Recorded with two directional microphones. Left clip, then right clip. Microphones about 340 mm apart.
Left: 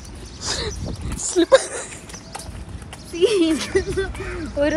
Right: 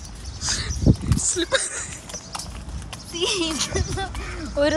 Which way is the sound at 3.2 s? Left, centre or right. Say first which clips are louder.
Left 6 dB; centre.